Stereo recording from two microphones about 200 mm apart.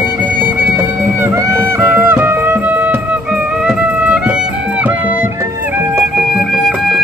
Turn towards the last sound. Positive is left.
turn(degrees=0)  # may be behind; listen again after turning